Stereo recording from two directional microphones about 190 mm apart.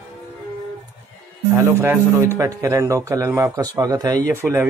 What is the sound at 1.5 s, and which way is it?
Speech, 10° right (ahead or behind).